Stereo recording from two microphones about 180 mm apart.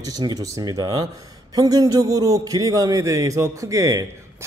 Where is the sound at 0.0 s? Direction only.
20° right (ahead or behind).